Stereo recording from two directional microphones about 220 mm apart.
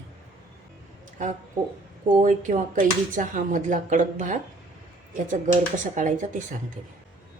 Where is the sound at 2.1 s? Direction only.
35° right (ahead or behind).